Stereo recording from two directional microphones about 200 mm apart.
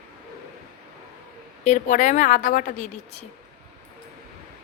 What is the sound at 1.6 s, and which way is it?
A woman's voice, 35° left (ahead or behind).